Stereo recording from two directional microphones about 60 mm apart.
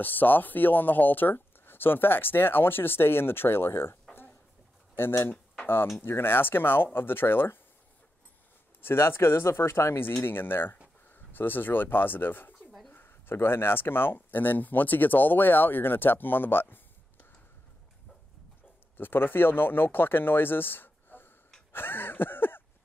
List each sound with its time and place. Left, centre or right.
0.0 s speech: left
4.1 s a sound: left
4.9 s speech: left
8.8 s speech: left
18.9 s speech: left
21.7 s a sound: left